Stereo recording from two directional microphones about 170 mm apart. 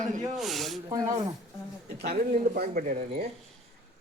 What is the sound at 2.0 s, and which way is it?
Speech, 65° right (ahead or behind).